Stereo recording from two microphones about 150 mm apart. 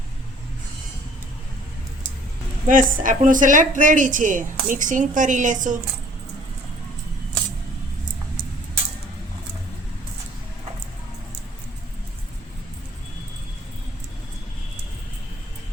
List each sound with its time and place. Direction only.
2.6 s a woman's voice: 65° right (ahead or behind)